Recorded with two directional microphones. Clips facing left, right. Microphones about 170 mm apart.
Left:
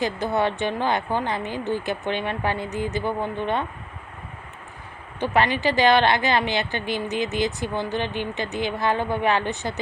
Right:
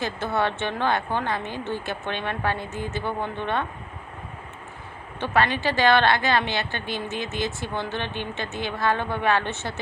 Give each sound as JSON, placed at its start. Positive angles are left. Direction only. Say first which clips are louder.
{"t": 0.0, "sound": "a woman's voice", "louder": "left 2 dB", "side_deg": 15}
{"t": 5.2, "sound": "a woman's voice", "louder": "left 2 dB", "side_deg": 15}